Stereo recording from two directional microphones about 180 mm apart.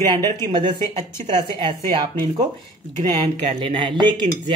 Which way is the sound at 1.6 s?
25° right (ahead or behind).